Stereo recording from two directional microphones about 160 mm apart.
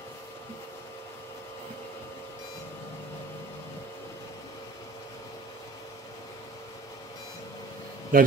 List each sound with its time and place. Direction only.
8.1 s a man's voice: 60° right (ahead or behind)